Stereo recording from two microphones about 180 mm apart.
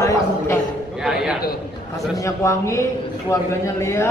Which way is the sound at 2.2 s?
15° left (ahead or behind).